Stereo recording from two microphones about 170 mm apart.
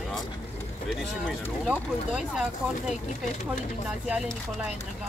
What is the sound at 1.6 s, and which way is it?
Speech, 5° right (ahead or behind).